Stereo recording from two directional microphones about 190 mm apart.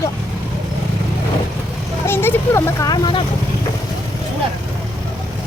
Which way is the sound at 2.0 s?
10° left (ahead or behind).